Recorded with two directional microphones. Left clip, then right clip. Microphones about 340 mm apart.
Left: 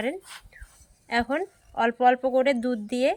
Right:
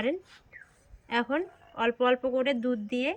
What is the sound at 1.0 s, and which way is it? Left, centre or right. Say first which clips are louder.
Speech: left 3 dB; centre.